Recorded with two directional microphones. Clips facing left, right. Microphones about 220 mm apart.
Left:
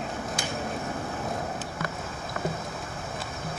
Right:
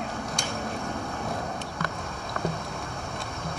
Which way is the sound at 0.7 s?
Centre (ahead or behind).